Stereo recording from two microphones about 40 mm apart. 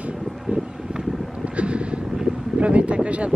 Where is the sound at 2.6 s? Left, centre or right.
Right.